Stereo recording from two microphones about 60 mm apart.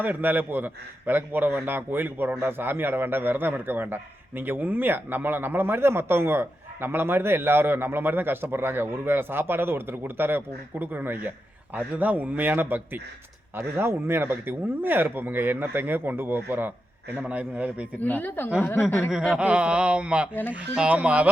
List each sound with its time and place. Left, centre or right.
0.0 s a man's voice: right
17.2 s speech: right
17.9 s speech: left
19.4 s speech: centre